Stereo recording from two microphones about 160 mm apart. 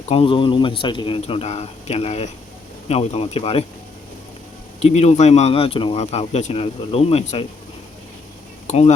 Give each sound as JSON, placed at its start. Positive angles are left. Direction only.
{"t": 0.1, "sound": "speech", "side_deg": 35}
{"t": 4.8, "sound": "speech", "side_deg": 40}
{"t": 8.6, "sound": "speech", "side_deg": 45}